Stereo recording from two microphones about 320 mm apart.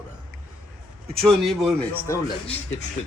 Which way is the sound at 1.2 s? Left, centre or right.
Centre.